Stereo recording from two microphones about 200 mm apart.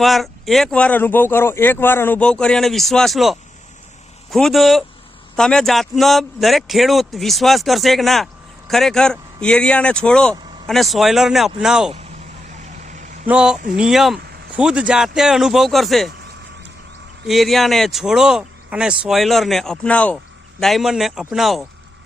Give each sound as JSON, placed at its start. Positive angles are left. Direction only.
{"t": 0.0, "sound": "a man's voice", "side_deg": 0}
{"t": 12.8, "sound": "vehicle", "side_deg": -40}
{"t": 13.2, "sound": "a man's voice", "side_deg": -5}
{"t": 17.2, "sound": "a man's voice", "side_deg": 0}